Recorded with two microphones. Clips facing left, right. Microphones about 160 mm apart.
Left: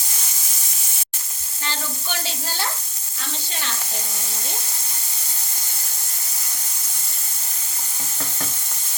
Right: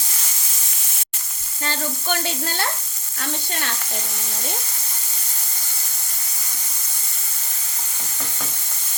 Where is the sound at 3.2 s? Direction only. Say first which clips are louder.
Right 5 dB; 55° right (ahead or behind).